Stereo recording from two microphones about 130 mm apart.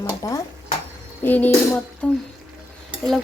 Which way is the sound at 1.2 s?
15° left (ahead or behind).